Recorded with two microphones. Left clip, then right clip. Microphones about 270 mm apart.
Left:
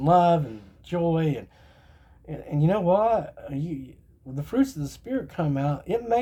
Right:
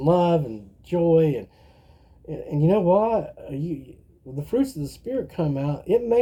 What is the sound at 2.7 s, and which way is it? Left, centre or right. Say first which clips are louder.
Speech: right 2 dB; left.